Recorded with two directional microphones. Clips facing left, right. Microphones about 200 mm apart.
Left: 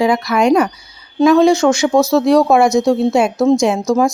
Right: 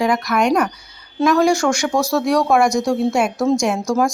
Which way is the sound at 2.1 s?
25° left (ahead or behind).